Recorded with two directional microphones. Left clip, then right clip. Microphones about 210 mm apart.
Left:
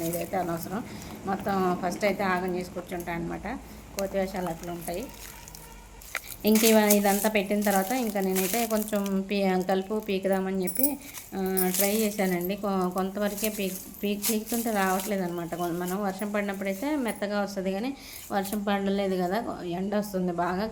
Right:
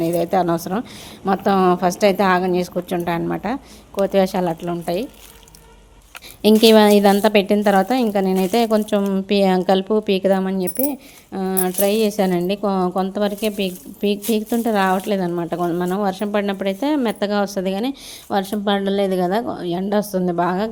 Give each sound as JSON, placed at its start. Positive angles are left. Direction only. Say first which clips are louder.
{"t": 0.2, "sound": "a woman's voice", "louder": "right 12 dB", "side_deg": -45}
{"t": 6.4, "sound": "a woman's voice", "louder": "right 10 dB", "side_deg": -50}